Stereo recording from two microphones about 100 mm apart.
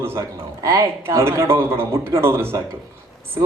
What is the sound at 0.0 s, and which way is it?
A man's voice, 25° right (ahead or behind).